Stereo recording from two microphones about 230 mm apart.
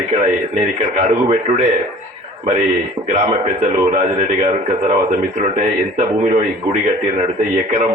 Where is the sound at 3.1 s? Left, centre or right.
Right.